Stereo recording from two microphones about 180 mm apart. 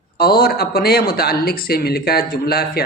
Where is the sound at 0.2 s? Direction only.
60° left (ahead or behind).